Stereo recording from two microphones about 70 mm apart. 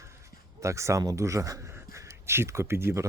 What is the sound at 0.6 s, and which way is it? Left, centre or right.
Speech, right.